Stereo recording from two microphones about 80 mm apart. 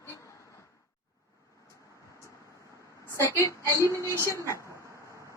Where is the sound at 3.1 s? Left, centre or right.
Left.